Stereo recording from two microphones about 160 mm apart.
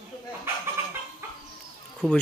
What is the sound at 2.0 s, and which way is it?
Speech, 5° left (ahead or behind).